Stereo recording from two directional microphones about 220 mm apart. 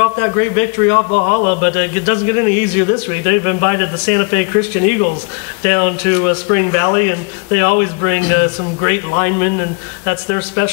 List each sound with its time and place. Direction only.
0.0 s a man's voice: 15° left (ahead or behind)
1.3 s a man's voice: 40° left (ahead or behind)
1.6 s a man's voice: 15° left (ahead or behind)
10.0 s a man's voice: 15° left (ahead or behind)